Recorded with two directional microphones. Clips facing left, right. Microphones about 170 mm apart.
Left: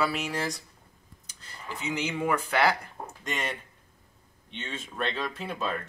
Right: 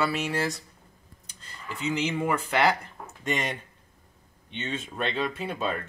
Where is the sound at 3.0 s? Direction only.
35° left (ahead or behind).